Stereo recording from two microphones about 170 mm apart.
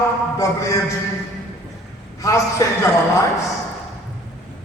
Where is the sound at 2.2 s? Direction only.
20° left (ahead or behind).